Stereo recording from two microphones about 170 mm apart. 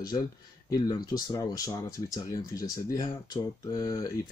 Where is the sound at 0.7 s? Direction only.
20° left (ahead or behind).